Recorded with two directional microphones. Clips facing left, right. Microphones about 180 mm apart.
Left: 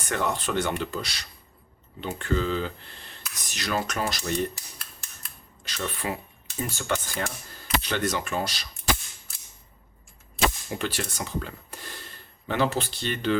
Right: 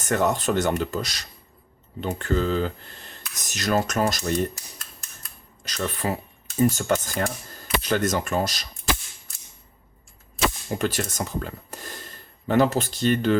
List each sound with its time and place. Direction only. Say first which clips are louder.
0.0 s speech: right 5 dB; 45° right (ahead or behind)
5.6 s speech: right 4 dB; 40° right (ahead or behind)
10.8 s speech: right 5 dB; 45° right (ahead or behind)